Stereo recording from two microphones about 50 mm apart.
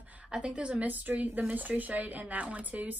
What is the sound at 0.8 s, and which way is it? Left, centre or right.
Speech, right.